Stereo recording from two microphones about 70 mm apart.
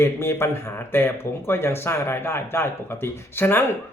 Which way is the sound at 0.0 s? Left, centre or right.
Left.